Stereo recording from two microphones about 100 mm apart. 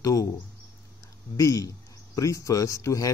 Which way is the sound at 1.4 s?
35° left (ahead or behind).